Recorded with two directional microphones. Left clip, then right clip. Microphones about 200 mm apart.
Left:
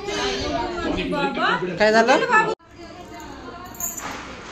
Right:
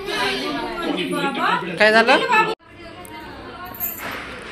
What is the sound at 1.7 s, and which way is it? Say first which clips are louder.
Speech: right 2 dB; 15° left (ahead or behind).